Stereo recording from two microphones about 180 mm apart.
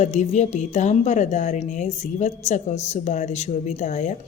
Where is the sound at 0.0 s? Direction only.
40° left (ahead or behind).